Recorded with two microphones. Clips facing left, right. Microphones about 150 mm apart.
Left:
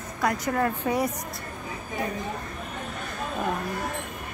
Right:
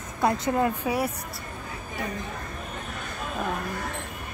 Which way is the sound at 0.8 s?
5° right (ahead or behind).